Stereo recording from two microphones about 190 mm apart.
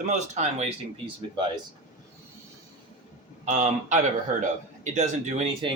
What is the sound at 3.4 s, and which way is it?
Speech, 40° right (ahead or behind).